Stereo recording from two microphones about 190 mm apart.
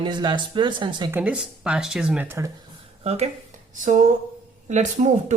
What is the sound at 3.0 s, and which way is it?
Speech, 35° right (ahead or behind).